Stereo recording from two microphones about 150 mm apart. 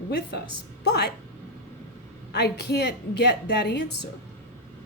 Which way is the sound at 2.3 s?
90° left.